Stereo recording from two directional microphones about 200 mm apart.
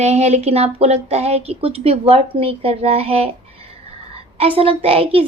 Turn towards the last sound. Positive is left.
turn(degrees=-30)  # may be behind; listen again after turning